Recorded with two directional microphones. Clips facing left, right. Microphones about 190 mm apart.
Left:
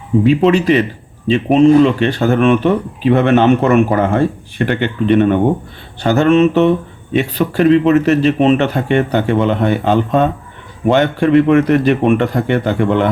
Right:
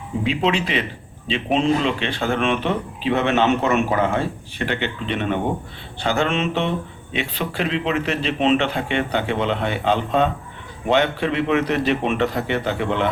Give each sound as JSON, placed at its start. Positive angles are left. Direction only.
{"t": 0.3, "sound": "speech", "side_deg": 45}